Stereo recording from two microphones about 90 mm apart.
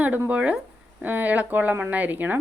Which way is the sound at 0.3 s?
15° right (ahead or behind).